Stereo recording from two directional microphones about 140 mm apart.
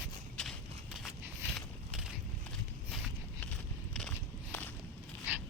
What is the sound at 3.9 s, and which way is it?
Walk, 10° left (ahead or behind).